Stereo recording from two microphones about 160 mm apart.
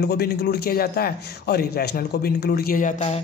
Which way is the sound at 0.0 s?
75° left (ahead or behind).